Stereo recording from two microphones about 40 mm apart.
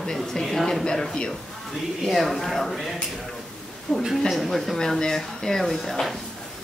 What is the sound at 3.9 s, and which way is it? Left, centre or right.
Speech, left.